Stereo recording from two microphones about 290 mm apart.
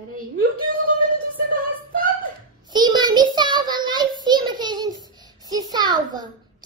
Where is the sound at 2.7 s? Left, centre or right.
Centre.